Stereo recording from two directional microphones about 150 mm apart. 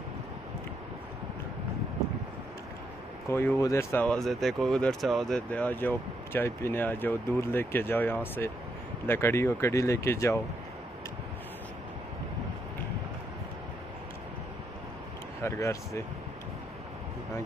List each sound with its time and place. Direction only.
3.3 s speech: 15° left (ahead or behind)
15.4 s speech: 20° left (ahead or behind)